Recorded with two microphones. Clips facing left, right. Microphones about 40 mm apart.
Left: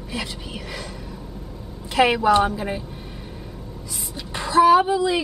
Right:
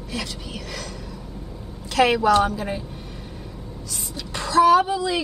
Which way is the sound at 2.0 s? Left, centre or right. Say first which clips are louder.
Even; centre.